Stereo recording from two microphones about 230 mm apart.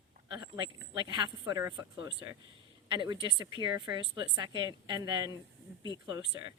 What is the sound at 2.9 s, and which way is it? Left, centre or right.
A woman's voice, centre.